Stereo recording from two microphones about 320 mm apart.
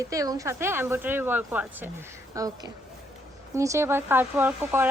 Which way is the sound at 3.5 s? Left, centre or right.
Centre.